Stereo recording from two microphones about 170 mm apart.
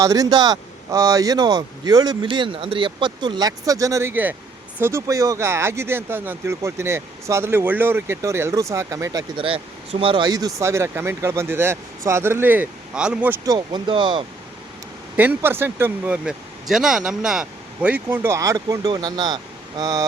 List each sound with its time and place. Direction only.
0.0 s speech: 20° right (ahead or behind)
9.3 s speech: 30° right (ahead or behind); by 13.3 s 5° right (ahead or behind)
13.4 s speech: 25° right (ahead or behind)
15.1 s speech: 10° right (ahead or behind)